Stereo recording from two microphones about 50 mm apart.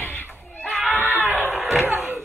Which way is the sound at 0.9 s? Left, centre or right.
Left.